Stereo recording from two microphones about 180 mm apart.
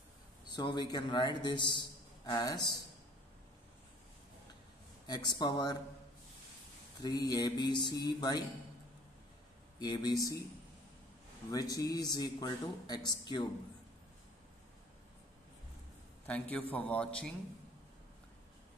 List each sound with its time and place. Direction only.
0.5 s a man's voice: 25° left (ahead or behind)
5.0 s speech: 25° left (ahead or behind)
7.0 s speech: 20° left (ahead or behind)
9.8 s speech: 25° left (ahead or behind)
11.5 s speech: 20° left (ahead or behind)
16.3 s a man's voice: 10° left (ahead or behind)